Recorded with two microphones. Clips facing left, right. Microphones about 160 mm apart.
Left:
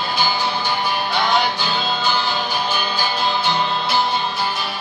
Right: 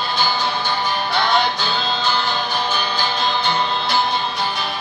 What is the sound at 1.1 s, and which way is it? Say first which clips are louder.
Music: right 1 dB; 10° left (ahead or behind).